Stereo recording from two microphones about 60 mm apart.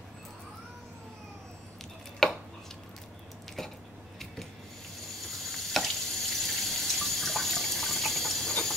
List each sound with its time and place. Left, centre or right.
2.2 s chopping: centre
3.6 s a sound: centre
5.3 s water: centre